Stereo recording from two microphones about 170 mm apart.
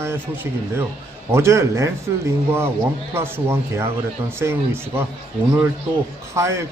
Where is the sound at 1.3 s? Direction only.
15° right (ahead or behind).